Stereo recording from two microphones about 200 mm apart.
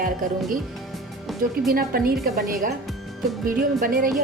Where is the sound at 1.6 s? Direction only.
50° right (ahead or behind).